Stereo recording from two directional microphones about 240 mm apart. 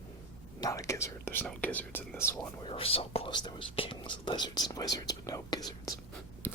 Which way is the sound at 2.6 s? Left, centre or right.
Left.